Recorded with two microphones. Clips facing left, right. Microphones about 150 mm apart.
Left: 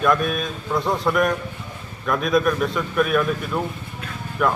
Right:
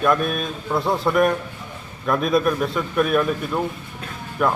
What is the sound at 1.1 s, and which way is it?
Speech, 25° right (ahead or behind).